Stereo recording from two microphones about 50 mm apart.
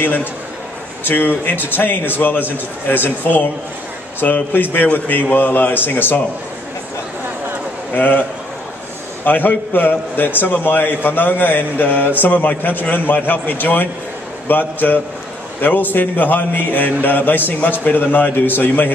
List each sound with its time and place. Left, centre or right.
0.0 s a man's voice: left
7.9 s a man's voice: left